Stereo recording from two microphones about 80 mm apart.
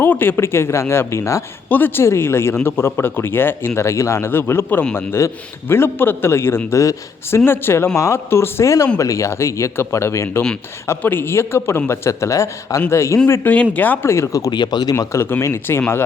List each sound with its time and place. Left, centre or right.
0.0 s a man's voice: left
1.7 s speech: left
3.8 s a man's voice: left
13.5 s speech: centre; by 14.5 s left
14.5 s speech: left
14.9 s a man's voice: left